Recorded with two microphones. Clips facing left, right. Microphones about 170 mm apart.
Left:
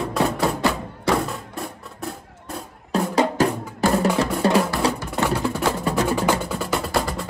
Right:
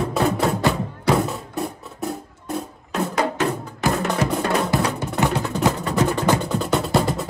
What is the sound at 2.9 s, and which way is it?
Music, 35° left (ahead or behind).